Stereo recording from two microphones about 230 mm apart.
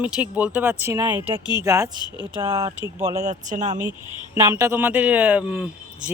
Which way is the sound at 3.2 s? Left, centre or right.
Right.